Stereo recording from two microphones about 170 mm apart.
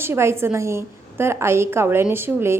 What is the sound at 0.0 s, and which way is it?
A woman's voice, 15° right (ahead or behind).